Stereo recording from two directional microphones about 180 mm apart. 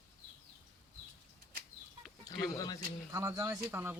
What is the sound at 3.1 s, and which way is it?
Speech, 15° right (ahead or behind).